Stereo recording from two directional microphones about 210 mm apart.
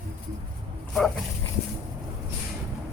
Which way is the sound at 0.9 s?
Centre (ahead or behind).